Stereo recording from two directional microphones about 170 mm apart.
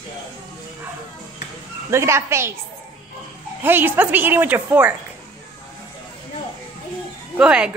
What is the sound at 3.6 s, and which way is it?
A woman's voice, 10° right (ahead or behind).